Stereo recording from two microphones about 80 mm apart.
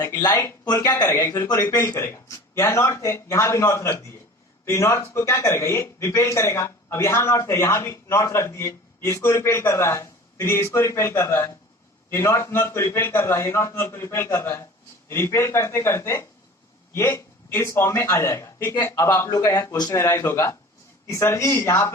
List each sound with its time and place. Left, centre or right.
0.2 s speech: left
1.0 s a man's voice: left